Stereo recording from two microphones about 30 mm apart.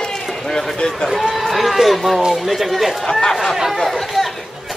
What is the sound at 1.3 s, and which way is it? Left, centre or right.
Run, centre.